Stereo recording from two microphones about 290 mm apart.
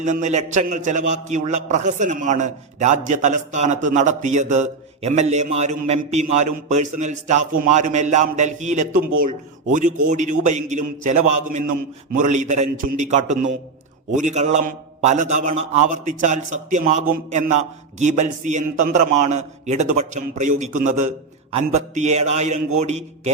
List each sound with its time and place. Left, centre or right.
0.0 s a man's voice: right
18.0 s a man's voice: right